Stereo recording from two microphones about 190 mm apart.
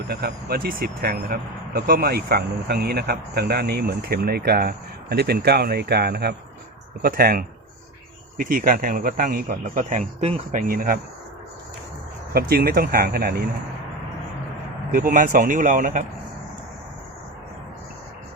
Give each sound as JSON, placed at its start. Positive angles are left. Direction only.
{"t": 0.1, "sound": "a man's voice", "side_deg": -55}
{"t": 12.3, "sound": "a man's voice", "side_deg": -55}
{"t": 14.9, "sound": "a man's voice", "side_deg": -45}